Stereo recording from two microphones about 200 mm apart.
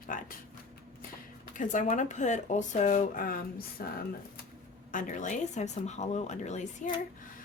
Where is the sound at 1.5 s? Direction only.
40° left (ahead or behind).